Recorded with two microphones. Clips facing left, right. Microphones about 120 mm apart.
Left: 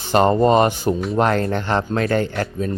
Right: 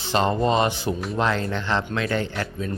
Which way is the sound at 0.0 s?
50° left (ahead or behind).